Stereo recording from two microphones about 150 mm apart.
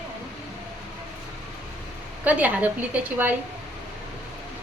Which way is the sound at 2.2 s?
10° right (ahead or behind).